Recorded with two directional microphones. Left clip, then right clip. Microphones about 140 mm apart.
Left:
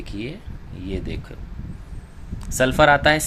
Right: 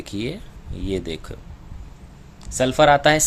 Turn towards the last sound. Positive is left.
turn(degrees=-20)  # may be behind; listen again after turning